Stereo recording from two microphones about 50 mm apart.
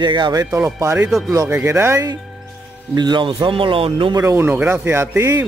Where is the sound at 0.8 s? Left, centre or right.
Right.